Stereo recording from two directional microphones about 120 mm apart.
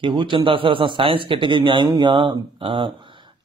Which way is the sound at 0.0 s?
45° right (ahead or behind).